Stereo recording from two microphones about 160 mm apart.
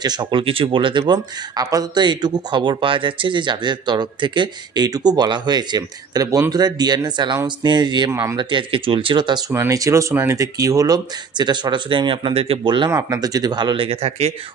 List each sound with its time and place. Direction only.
0.0 s speech: 25° right (ahead or behind)
8.4 s speech: 30° right (ahead or behind)
9.5 s speech: 20° right (ahead or behind); by 14.3 s 40° right (ahead or behind)